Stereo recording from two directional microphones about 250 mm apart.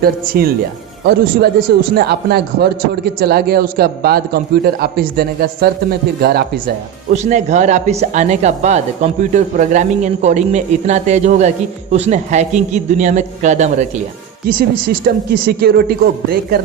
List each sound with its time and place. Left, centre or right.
0.0 s a man's voice: right
7.1 s a woman's voice: right
15.0 s a man's voice: right